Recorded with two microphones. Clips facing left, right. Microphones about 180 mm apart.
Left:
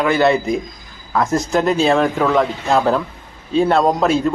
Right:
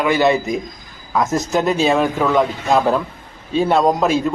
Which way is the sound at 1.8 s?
10° right (ahead or behind).